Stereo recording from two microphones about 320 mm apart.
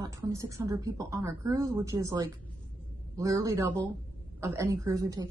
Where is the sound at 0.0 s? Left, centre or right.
Centre.